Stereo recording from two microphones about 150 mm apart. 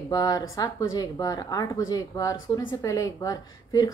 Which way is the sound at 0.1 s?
25° left (ahead or behind).